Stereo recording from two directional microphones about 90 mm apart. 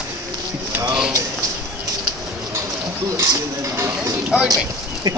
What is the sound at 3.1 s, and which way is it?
A man's voice, 35° right (ahead or behind).